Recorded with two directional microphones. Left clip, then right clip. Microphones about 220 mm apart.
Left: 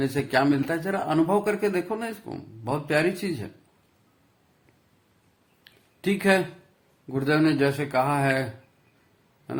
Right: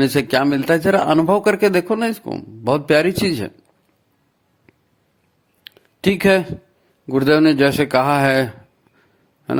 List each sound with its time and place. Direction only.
0.0 s speech: 45° right (ahead or behind)
5.6 s a sound: 45° right (ahead or behind)
7.1 s speech: 45° right (ahead or behind)